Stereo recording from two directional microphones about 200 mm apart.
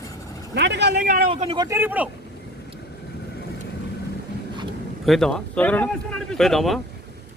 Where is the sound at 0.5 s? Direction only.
60° right (ahead or behind).